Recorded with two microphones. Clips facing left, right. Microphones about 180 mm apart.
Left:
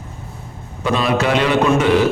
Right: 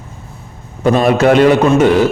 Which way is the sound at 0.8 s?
45° right (ahead or behind).